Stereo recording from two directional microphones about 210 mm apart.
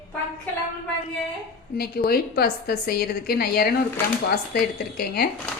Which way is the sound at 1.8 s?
45° left (ahead or behind).